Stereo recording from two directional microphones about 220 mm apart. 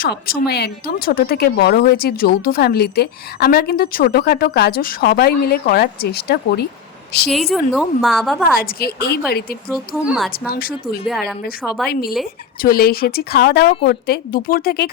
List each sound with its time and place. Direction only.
0.0 s speech: 45° left (ahead or behind)
7.3 s a woman's voice: centre (ahead or behind)
8.5 s speech: 45° left (ahead or behind)
9.7 s a woman's voice: 5° right (ahead or behind)
10.3 s speech: 40° left (ahead or behind)
11.0 s a woman's voice: centre (ahead or behind)
11.9 s speech: 45° left (ahead or behind)